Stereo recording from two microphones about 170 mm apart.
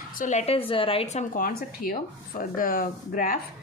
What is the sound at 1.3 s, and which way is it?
Speech, 60° left (ahead or behind).